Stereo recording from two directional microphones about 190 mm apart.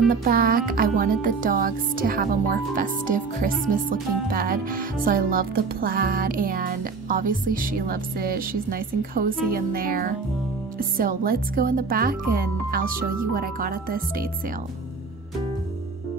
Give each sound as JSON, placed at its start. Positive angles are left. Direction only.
{"t": 0.1, "sound": "music", "side_deg": -50}